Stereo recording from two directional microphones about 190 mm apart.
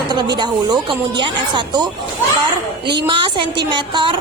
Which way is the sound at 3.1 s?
25° right (ahead or behind).